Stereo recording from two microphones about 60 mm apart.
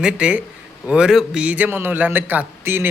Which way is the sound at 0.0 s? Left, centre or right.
Right.